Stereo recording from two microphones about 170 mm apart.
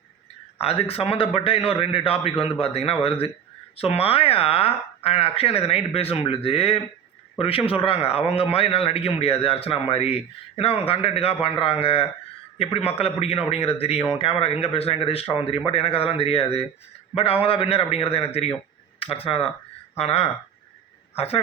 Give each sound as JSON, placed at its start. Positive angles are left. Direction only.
{"t": 0.6, "sound": "a man's voice", "side_deg": 35}